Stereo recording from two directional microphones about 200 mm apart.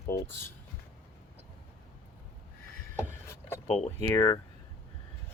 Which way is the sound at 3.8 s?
10° left (ahead or behind).